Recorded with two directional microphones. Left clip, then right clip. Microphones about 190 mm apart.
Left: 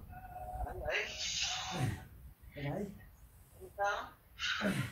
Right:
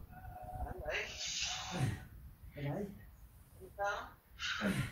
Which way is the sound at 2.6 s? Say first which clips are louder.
Left 2 dB; 15° left (ahead or behind).